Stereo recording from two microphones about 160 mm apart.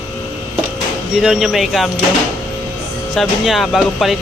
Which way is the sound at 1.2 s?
Centre (ahead or behind).